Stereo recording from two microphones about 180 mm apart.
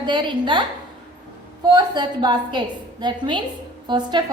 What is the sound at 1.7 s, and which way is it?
A woman's voice, 25° right (ahead or behind).